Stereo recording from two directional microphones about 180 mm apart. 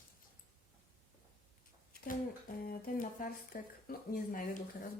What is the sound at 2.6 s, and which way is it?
Speech, 50° left (ahead or behind).